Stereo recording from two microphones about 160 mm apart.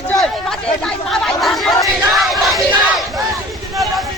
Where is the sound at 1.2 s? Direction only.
Centre (ahead or behind).